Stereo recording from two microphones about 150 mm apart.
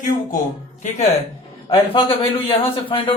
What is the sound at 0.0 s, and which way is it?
Speech, 55° left (ahead or behind).